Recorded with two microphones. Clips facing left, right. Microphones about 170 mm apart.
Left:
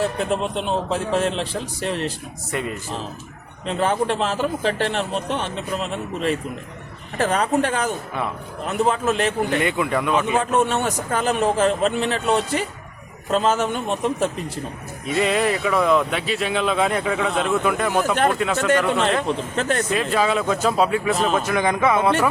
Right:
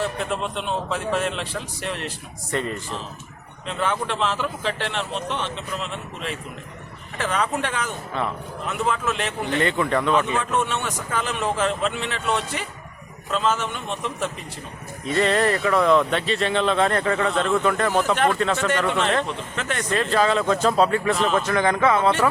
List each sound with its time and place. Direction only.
0.3 s a man's voice: 35° left (ahead or behind)
2.5 s speech: 10° left (ahead or behind)
3.7 s a man's voice: 40° left (ahead or behind)
9.6 s speech: 10° left (ahead or behind)
10.3 s a man's voice: 40° left (ahead or behind)
15.0 s speech: 10° left (ahead or behind)
19.3 s a man's voice: 40° left (ahead or behind)
19.9 s speech: 10° left (ahead or behind)